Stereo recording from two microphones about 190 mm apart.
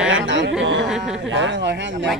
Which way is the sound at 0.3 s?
75° right (ahead or behind).